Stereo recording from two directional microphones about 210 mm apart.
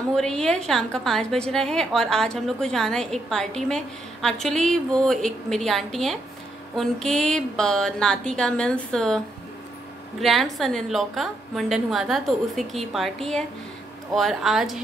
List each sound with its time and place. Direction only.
0.1 s a woman's voice: 5° left (ahead or behind)
10.2 s a woman's voice: centre (ahead or behind)